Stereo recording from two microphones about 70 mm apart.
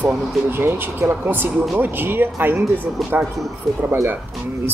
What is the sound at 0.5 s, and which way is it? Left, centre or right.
Speech, right.